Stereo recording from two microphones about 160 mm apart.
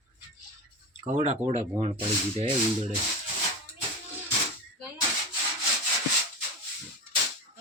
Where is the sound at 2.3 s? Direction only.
35° right (ahead or behind).